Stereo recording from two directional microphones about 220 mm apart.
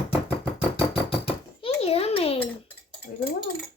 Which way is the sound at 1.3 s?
25° left (ahead or behind).